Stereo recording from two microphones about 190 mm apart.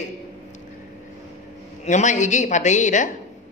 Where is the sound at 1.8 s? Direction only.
40° left (ahead or behind).